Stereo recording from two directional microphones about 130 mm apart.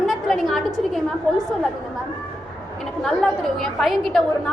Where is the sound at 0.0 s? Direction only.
Centre (ahead or behind).